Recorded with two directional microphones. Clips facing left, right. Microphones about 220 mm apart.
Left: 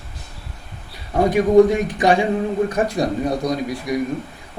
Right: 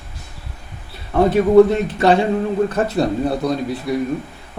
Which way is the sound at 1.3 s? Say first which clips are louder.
Right 1 dB; 15° left (ahead or behind).